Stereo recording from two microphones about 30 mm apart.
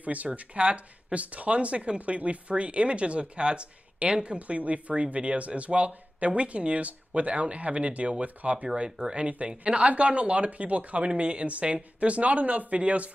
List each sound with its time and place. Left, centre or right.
0.0 s speech: right
4.4 s a woman's voice: right
9.8 s speech: right